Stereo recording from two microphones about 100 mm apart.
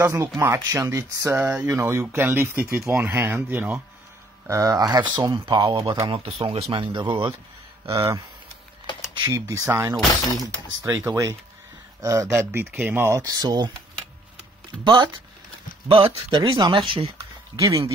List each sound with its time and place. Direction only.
0.0 s speech: 25° right (ahead or behind)
1.4 s speech: 15° right (ahead or behind)
1.7 s speech: 25° right (ahead or behind)
4.5 s speech: 35° right (ahead or behind); by 5.9 s 50° right (ahead or behind)
6.0 s speech: 75° right (ahead or behind)
6.7 s speech: 55° right (ahead or behind)
7.9 s speech: 30° right (ahead or behind)
9.3 s speech: 30° right (ahead or behind)
13.2 s speech: 40° right (ahead or behind)
15.9 s speech: 55° right (ahead or behind)
17.6 s speech: 35° right (ahead or behind)